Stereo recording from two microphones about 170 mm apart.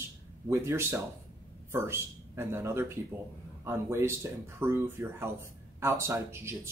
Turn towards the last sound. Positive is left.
turn(degrees=-15)  # may be behind; listen again after turning